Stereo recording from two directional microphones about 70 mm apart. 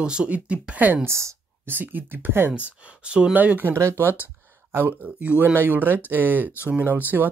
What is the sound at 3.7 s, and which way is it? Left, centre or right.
Speech, right.